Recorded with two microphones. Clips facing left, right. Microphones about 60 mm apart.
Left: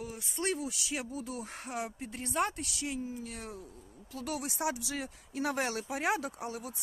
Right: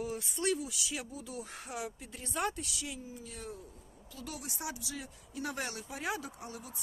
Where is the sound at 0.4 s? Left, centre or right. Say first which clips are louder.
Left 1 dB; left.